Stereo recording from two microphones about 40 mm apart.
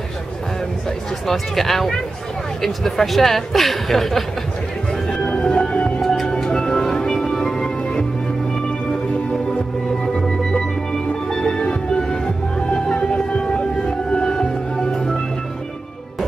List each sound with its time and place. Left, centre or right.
1.2 s speech: centre
5.1 s music: left
5.9 s music: centre
10.0 s music: centre